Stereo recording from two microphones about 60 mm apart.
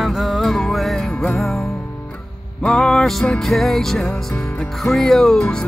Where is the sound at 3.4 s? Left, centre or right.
Centre.